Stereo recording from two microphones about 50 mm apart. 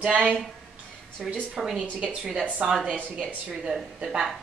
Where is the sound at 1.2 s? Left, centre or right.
Centre.